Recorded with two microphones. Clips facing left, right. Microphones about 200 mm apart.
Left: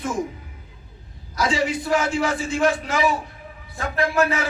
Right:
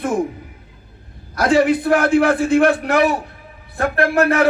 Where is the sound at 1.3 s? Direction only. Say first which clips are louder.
Right 8 dB; 60° right (ahead or behind).